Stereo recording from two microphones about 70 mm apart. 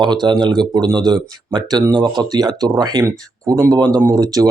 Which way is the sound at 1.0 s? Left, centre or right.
Right.